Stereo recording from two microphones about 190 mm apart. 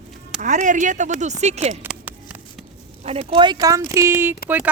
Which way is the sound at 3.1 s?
30° right (ahead or behind).